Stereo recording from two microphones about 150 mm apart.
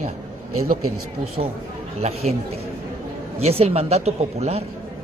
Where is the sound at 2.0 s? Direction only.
45° right (ahead or behind).